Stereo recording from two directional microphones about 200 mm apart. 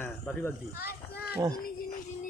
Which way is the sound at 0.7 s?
50° left (ahead or behind).